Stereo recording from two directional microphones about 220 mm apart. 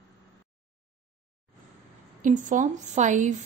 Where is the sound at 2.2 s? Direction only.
35° right (ahead or behind).